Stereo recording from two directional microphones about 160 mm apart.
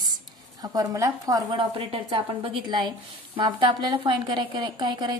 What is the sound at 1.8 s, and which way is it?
A woman's voice, 35° right (ahead or behind).